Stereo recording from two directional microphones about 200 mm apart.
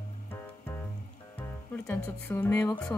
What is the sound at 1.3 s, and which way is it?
Speech, 10° left (ahead or behind).